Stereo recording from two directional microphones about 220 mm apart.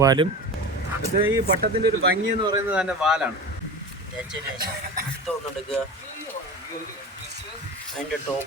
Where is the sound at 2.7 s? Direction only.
5° right (ahead or behind).